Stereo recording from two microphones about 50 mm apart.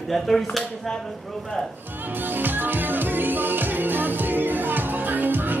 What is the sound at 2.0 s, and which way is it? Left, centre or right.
Music, right.